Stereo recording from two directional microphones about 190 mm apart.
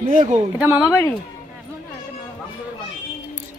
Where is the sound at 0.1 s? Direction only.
40° right (ahead or behind).